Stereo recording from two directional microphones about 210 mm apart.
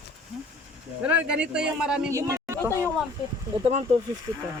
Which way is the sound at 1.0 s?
5° right (ahead or behind).